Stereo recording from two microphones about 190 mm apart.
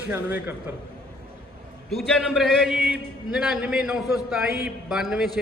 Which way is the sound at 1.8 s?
Centre (ahead or behind).